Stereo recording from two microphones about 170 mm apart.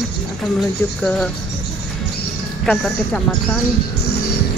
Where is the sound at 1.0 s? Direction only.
5° left (ahead or behind).